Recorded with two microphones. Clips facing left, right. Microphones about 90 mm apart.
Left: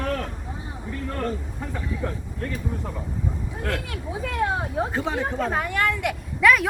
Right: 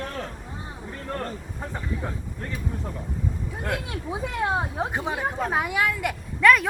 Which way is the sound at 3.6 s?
20° right (ahead or behind).